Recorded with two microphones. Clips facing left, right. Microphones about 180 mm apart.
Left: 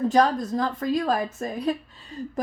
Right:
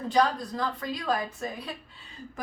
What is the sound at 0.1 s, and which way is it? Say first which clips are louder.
A woman's voice: left 5 dB; 45° left (ahead or behind).